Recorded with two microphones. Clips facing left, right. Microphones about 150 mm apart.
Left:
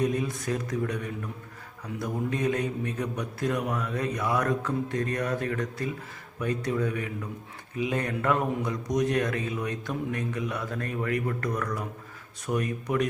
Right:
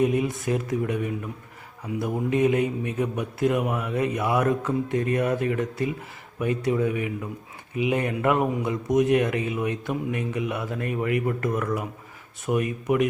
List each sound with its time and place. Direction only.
0.0 s a man's voice: 15° right (ahead or behind)